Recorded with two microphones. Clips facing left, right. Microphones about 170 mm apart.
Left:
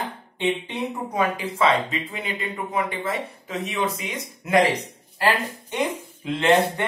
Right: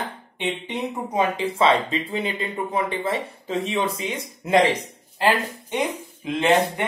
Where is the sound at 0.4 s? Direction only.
20° right (ahead or behind).